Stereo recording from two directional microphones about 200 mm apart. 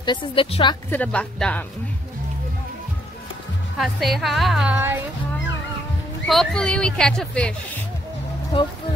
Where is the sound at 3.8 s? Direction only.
Centre (ahead or behind).